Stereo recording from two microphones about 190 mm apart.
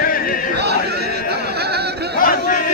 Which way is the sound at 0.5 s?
60° right (ahead or behind).